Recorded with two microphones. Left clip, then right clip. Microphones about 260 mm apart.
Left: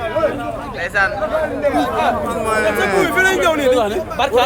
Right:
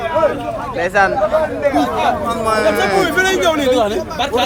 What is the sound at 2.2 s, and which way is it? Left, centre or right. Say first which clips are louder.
A man's voice: right 2 dB; centre.